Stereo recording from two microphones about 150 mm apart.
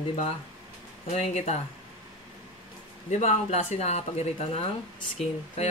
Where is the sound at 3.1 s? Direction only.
50° left (ahead or behind).